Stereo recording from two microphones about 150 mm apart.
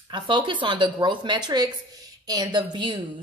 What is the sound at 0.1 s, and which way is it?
A woman's voice, 30° right (ahead or behind).